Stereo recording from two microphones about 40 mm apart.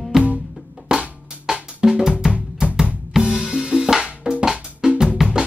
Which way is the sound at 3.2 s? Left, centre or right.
Right.